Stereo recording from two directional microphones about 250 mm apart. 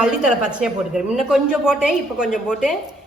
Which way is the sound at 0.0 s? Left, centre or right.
Centre.